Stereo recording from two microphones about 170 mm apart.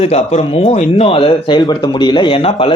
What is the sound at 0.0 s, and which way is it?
Speech, 35° left (ahead or behind).